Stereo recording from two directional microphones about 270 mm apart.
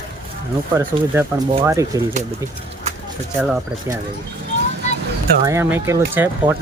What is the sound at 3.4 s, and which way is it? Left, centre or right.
Speech, centre.